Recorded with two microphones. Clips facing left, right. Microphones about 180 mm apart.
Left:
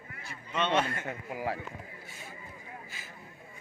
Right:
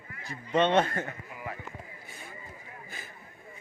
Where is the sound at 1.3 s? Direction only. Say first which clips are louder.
Left 8 dB; 85° left.